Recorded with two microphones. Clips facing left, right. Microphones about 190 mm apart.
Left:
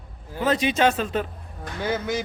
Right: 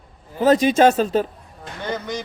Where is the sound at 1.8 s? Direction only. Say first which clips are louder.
Left 2 dB; 5° left (ahead or behind).